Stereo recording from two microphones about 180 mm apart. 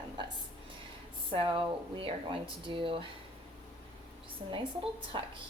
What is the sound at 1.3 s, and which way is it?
A woman's voice, 30° right (ahead or behind).